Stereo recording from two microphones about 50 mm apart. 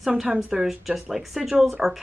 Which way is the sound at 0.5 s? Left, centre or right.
Centre.